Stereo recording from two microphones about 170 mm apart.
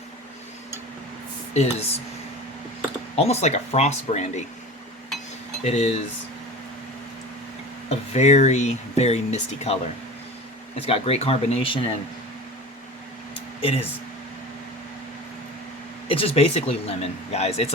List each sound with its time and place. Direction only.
1.5 s speech: 40° left (ahead or behind)
3.2 s speech: 40° left (ahead or behind)
5.6 s speech: 40° left (ahead or behind)
7.9 s speech: 40° left (ahead or behind)
13.6 s speech: 35° left (ahead or behind)
16.0 s speech: 35° left (ahead or behind)